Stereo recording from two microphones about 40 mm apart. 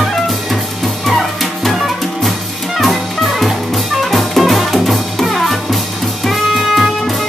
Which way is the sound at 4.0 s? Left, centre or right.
Centre.